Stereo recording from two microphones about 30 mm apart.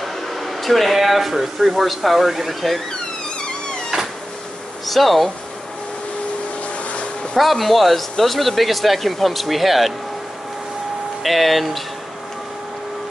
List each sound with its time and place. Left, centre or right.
0.0 s a sound: centre
0.9 s speech: centre
3.3 s vehicle: left
4.8 s speech: centre
6.8 s vehicle: left
7.3 s speech: centre
11.2 s speech: centre